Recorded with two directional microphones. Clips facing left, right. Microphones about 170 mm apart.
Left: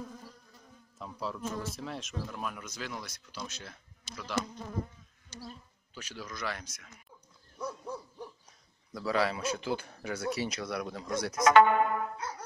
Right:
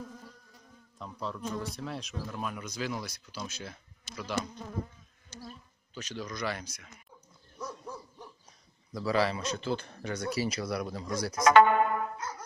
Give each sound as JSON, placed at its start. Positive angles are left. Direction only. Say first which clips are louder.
{"t": 0.9, "sound": "speech", "louder": "even", "side_deg": 5}
{"t": 5.9, "sound": "speech", "louder": "right 4 dB", "side_deg": 5}
{"t": 7.5, "sound": "dog", "louder": "left 2 dB", "side_deg": 5}
{"t": 8.9, "sound": "speech", "louder": "right 2 dB", "side_deg": 0}
{"t": 11.5, "sound": "music", "louder": "right 1 dB", "side_deg": -45}